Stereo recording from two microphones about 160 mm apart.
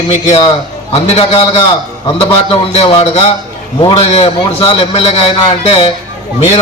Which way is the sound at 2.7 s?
40° left (ahead or behind).